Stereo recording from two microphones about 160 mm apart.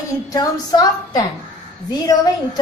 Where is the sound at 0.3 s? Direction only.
25° left (ahead or behind).